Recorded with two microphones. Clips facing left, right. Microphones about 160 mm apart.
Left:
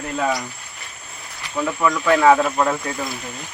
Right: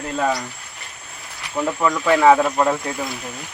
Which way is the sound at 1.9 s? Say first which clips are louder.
Right 1 dB; 15° right (ahead or behind).